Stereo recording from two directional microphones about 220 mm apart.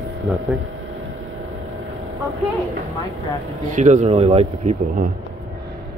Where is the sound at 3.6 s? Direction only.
35° right (ahead or behind).